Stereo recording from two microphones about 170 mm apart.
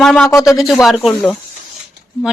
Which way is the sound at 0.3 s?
15° left (ahead or behind).